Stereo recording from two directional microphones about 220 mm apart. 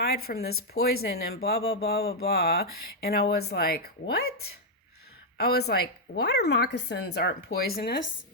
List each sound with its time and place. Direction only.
0.0 s speech: 45° left (ahead or behind)